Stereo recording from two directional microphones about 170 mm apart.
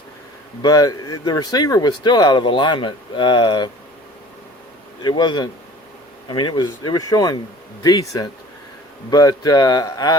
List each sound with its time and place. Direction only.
0.6 s speech: 20° left (ahead or behind)
5.0 s speech: 25° left (ahead or behind)